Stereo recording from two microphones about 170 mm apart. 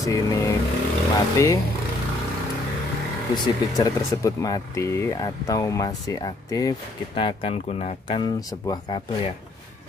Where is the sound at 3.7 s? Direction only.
20° left (ahead or behind); by 8.2 s 40° left (ahead or behind).